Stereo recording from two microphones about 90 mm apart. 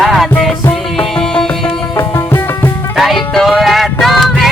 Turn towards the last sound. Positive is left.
turn(degrees=0)  # may be behind; listen again after turning